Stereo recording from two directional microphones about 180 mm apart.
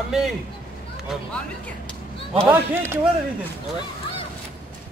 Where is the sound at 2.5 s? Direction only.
15° right (ahead or behind).